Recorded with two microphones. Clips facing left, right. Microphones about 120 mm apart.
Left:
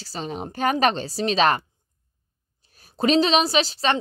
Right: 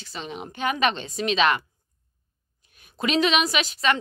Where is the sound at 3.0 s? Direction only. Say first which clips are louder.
Left 3 dB; 30° left (ahead or behind).